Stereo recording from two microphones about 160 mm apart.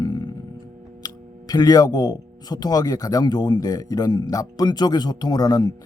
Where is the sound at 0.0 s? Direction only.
25° left (ahead or behind).